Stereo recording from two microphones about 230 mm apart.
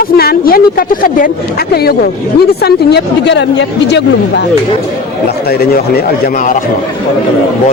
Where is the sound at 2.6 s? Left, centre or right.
Left.